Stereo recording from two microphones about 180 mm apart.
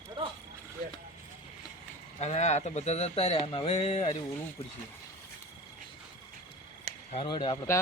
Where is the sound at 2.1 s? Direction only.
40° left (ahead or behind).